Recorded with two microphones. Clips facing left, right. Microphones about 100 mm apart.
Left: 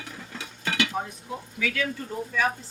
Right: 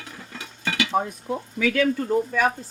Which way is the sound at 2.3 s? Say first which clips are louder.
Right 4 dB; 55° right (ahead or behind).